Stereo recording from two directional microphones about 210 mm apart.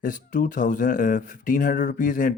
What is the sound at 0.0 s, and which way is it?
Speech, 40° left (ahead or behind).